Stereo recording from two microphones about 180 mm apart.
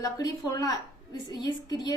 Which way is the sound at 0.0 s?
20° left (ahead or behind).